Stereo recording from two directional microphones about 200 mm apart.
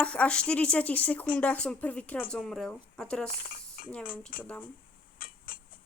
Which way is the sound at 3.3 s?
50° left (ahead or behind).